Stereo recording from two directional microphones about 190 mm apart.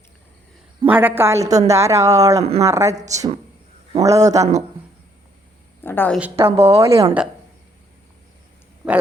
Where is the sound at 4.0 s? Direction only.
15° right (ahead or behind).